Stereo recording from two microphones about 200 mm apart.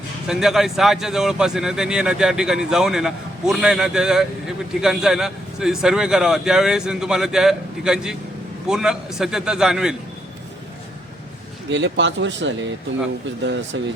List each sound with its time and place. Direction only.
0.3 s a man's voice: centre (ahead or behind)
11.7 s speech: 65° right (ahead or behind)
13.7 s speech: 65° right (ahead or behind)